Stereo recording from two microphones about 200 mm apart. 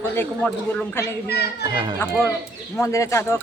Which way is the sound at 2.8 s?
15° left (ahead or behind).